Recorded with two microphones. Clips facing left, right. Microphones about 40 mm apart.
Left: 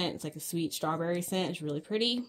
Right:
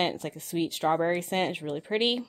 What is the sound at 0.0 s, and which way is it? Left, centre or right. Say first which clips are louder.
Speech: right 6 dB; right.